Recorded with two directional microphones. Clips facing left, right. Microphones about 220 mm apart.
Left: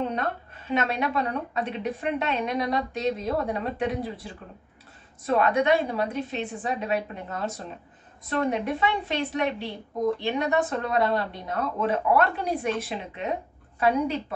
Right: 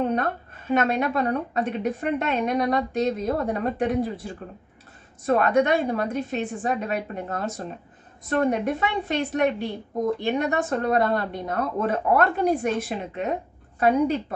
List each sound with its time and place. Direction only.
0.7 s a woman's voice: 50° right (ahead or behind)